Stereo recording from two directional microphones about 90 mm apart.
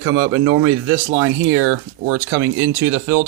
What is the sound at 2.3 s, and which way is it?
Speech, 30° right (ahead or behind).